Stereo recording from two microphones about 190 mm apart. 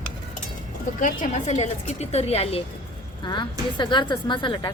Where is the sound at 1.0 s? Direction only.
40° left (ahead or behind).